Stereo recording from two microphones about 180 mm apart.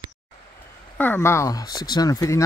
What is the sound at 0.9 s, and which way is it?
Speech, 10° left (ahead or behind).